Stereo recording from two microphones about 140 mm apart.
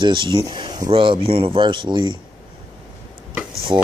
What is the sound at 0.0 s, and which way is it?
Speech, 35° right (ahead or behind).